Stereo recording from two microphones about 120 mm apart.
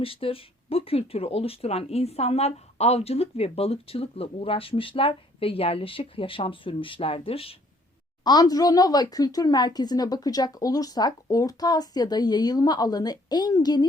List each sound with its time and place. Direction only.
0.0 s speech: 50° left (ahead or behind)
8.2 s speech: 35° left (ahead or behind)